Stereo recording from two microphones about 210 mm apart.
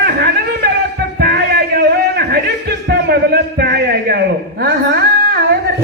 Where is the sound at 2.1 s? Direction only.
50° right (ahead or behind).